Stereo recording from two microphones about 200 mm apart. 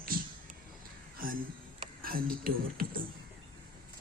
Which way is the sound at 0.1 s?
45° right (ahead or behind).